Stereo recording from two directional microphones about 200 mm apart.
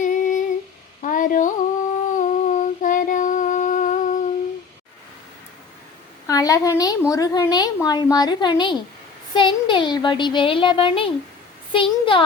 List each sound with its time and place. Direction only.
0.0 s humming: 40° left (ahead or behind)
1.0 s a sound: 40° left (ahead or behind)
2.1 s humming: 40° left (ahead or behind)
6.2 s a woman's voice: 15° left (ahead or behind)